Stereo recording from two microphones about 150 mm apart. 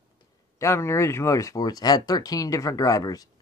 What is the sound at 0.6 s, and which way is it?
Speech, 20° left (ahead or behind).